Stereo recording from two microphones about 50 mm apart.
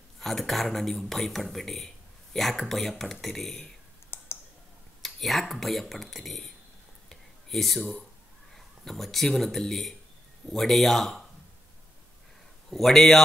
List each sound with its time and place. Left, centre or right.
0.2 s speech: centre
4.1 s clicking: left
5.0 s speech: centre
7.1 s a sound: centre
8.5 s speech: centre
12.6 s speech: centre